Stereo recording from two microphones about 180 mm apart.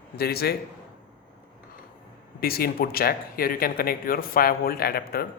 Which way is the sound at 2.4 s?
55° left (ahead or behind).